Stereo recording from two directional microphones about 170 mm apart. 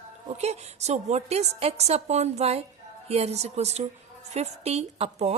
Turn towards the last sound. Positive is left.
turn(degrees=-35)  # may be behind; listen again after turning